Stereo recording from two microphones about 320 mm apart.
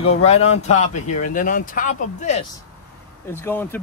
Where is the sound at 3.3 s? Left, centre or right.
Centre.